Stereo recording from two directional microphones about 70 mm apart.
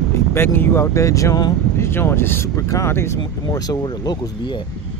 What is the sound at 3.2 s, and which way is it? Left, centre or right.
Speech, left.